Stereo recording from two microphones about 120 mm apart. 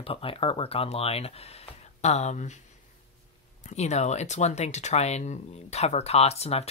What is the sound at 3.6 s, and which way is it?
Speech, 70° left (ahead or behind).